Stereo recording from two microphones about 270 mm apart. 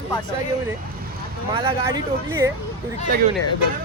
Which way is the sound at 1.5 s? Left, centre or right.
Centre.